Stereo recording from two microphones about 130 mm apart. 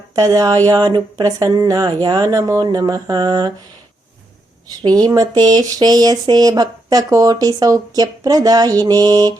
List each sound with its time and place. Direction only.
0.2 s speech: 30° right (ahead or behind)
5.0 s speech: 30° right (ahead or behind)